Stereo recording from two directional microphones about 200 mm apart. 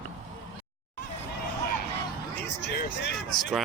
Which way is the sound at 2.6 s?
60° left (ahead or behind).